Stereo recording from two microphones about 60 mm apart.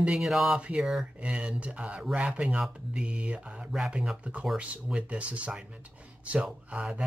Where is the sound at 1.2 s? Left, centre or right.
Centre.